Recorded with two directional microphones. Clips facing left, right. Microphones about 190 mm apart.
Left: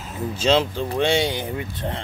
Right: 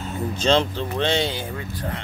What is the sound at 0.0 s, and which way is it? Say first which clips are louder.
Speech: even; 5° left (ahead or behind).